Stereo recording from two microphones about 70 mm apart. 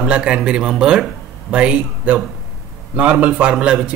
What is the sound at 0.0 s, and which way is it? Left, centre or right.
Speech, centre.